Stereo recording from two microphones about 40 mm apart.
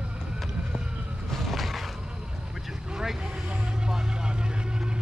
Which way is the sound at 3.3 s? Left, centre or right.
Right.